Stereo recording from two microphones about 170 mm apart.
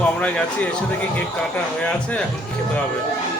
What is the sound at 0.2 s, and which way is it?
Speech, 5° left (ahead or behind).